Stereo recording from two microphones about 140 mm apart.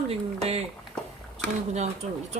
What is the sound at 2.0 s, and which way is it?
Speech, 50° right (ahead or behind).